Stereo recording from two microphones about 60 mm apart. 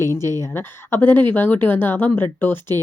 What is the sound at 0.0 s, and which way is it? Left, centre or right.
Speech, left.